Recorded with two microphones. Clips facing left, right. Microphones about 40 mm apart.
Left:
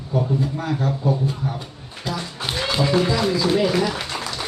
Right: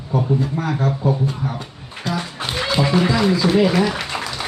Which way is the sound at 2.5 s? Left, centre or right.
Centre.